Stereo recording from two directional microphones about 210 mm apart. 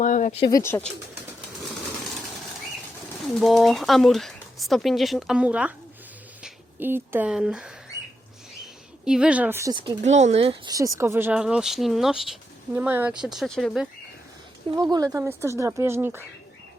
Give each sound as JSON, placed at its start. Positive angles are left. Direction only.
{"t": 0.0, "sound": "speech", "side_deg": 35}
{"t": 0.5, "sound": "speech", "side_deg": 10}
{"t": 3.4, "sound": "speech", "side_deg": 0}
{"t": 9.0, "sound": "speech", "side_deg": -5}
{"t": 10.0, "sound": "speech", "side_deg": -35}
{"t": 10.8, "sound": "speech", "side_deg": -15}
{"t": 14.8, "sound": "speech", "side_deg": -20}